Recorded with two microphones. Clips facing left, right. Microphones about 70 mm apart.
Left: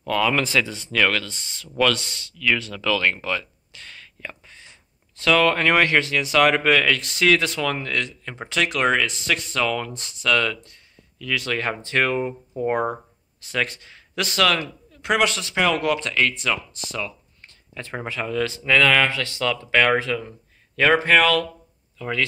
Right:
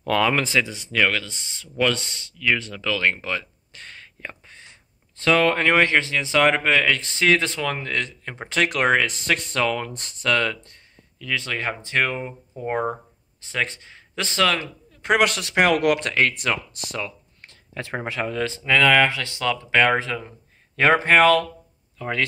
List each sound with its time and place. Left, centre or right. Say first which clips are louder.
0.0 s speech: right 1 dB; right
0.3 s speech: even; right
3.7 s a sound: right 1 dB; right
5.2 s speech: even; right
8.5 s speech: right 1 dB; right
9.9 s speech: left 1 dB; right
11.1 s speech: left 2 dB; right
13.4 s a man's voice: left 1 dB; right
15.2 s speech: right 2 dB; right
17.4 s a sound: right 4 dB; right
18.2 s speech: left 2 dB; right
18.6 s speech: right 1 dB; centre; by 22.2 s right